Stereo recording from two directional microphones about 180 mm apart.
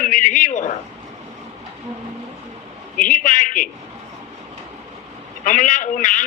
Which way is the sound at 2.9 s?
45° left (ahead or behind).